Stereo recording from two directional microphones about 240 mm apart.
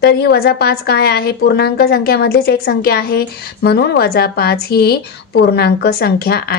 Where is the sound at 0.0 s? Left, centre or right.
Left.